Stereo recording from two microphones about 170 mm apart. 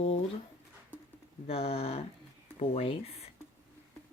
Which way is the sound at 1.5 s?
35° left (ahead or behind).